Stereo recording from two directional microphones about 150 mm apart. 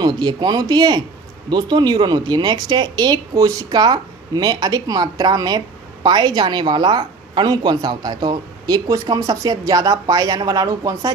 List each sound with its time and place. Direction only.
0.0 s a woman's voice: 30° right (ahead or behind)